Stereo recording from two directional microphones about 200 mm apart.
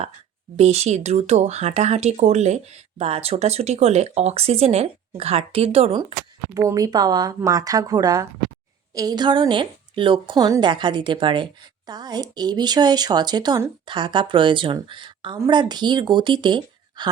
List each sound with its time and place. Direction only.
0.5 s speech: 30° right (ahead or behind)
6.5 s speech: 15° right (ahead or behind)